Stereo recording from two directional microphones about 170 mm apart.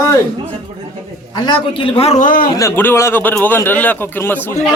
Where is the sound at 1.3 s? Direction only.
25° left (ahead or behind); by 2.5 s 55° left (ahead or behind).